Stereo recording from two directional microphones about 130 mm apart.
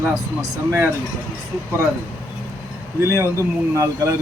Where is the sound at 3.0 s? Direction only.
20° right (ahead or behind).